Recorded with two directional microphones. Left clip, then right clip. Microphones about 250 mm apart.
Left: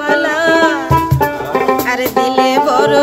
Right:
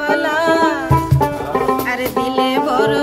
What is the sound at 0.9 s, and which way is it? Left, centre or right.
Music, left.